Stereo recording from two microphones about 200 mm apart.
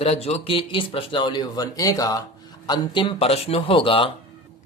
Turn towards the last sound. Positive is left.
turn(degrees=25)  # may be behind; listen again after turning